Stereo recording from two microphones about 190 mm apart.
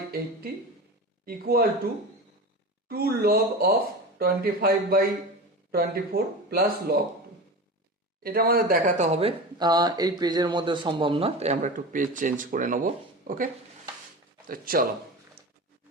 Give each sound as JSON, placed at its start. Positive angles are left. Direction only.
{"t": 1.2, "sound": "speech", "side_deg": -50}
{"t": 2.9, "sound": "speech", "side_deg": -55}
{"t": 8.2, "sound": "speech", "side_deg": -50}
{"t": 9.6, "sound": "speech", "side_deg": -20}